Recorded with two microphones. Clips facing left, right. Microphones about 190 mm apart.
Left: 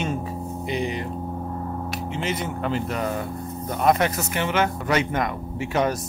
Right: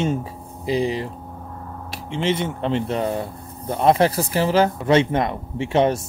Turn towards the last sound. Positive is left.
turn(degrees=-30)  # may be behind; listen again after turning